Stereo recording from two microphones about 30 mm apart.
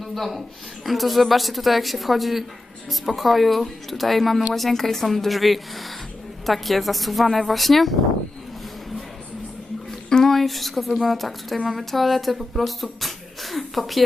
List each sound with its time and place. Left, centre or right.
0.0 s a woman's voice: centre
10.1 s speech: left
10.3 s speech: centre